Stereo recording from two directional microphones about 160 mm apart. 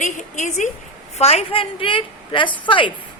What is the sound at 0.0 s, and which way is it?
A woman's voice, 50° left (ahead or behind).